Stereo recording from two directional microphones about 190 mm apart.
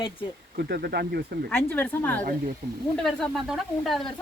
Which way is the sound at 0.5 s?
55° right (ahead or behind).